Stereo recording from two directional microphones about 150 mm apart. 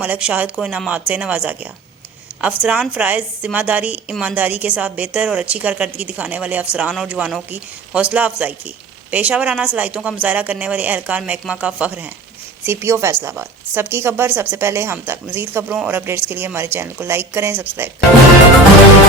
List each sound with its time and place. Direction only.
0.0 s a woman's voice: 10° right (ahead or behind)
4.1 s a woman's voice: centre (ahead or behind)
4.4 s a woman's voice: 10° right (ahead or behind)